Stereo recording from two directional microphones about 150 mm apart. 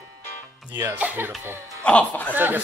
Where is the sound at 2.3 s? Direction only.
15° right (ahead or behind).